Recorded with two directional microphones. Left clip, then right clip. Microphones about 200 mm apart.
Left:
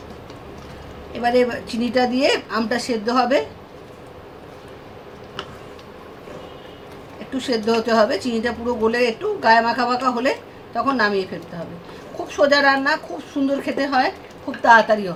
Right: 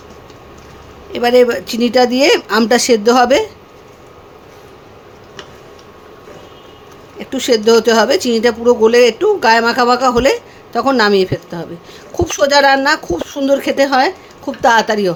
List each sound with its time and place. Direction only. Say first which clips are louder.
1.1 s speech: right 8 dB; 55° right (ahead or behind)
7.3 s a woman's voice: right 10 dB; 55° right (ahead or behind)